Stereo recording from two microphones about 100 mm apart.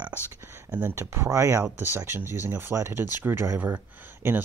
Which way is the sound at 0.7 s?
20° right (ahead or behind).